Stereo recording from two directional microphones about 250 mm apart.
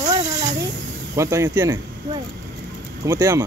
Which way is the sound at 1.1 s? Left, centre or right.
Centre.